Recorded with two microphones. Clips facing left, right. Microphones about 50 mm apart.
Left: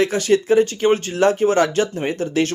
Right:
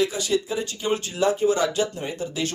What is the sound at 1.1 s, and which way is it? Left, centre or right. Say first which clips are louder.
Speech: left 5 dB; left.